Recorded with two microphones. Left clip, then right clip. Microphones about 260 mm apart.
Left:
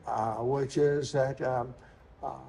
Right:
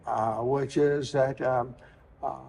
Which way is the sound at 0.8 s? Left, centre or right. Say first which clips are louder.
Right 2 dB; right.